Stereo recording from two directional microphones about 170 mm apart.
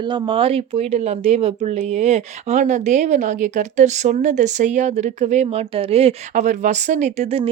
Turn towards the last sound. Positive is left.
turn(degrees=-40)  # may be behind; listen again after turning